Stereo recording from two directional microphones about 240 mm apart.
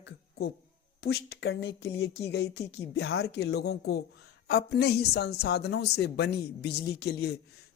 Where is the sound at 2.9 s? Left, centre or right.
Left.